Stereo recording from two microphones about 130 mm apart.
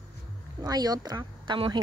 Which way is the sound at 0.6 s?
30° right (ahead or behind).